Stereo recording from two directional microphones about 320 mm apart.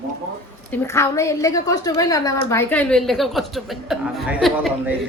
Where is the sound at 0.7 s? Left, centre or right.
Centre.